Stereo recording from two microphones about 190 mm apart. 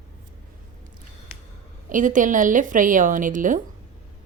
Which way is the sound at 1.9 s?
45° right (ahead or behind).